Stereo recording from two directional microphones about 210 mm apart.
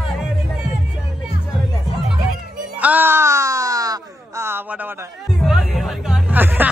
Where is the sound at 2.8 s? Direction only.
10° right (ahead or behind).